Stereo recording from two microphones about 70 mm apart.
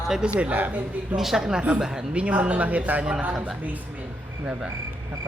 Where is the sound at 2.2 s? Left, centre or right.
Centre.